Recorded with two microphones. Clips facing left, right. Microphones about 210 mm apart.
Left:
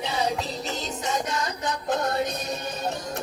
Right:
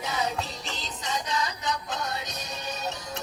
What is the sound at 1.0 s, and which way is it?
Music, 50° left (ahead or behind).